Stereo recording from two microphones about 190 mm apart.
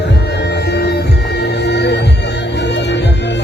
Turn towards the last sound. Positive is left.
turn(degrees=65)  # may be behind; listen again after turning